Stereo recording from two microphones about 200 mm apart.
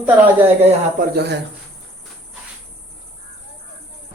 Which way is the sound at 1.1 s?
55° right (ahead or behind).